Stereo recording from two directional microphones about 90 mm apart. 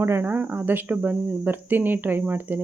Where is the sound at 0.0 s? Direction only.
25° right (ahead or behind).